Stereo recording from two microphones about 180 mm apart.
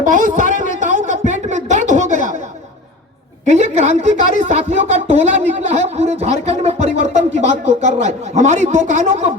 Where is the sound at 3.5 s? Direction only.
40° right (ahead or behind).